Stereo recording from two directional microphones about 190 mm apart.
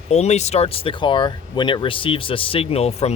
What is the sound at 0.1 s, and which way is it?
Speech, 35° left (ahead or behind).